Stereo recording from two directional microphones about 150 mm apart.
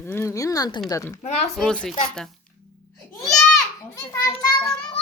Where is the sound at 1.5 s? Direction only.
5° left (ahead or behind).